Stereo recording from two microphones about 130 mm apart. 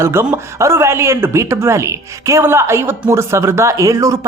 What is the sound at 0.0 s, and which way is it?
Speech, 20° right (ahead or behind).